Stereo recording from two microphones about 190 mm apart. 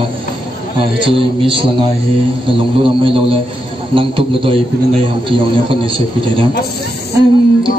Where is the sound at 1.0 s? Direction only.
25° right (ahead or behind).